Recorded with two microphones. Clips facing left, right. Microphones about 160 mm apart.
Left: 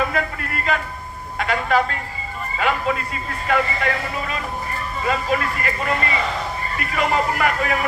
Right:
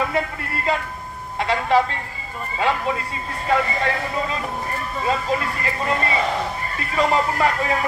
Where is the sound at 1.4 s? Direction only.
25° right (ahead or behind).